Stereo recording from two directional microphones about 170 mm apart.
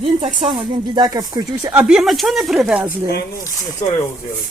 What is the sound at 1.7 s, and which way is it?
A woman's voice, 5° right (ahead or behind).